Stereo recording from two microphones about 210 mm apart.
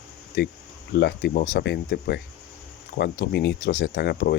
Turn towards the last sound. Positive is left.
turn(degrees=50)  # may be behind; listen again after turning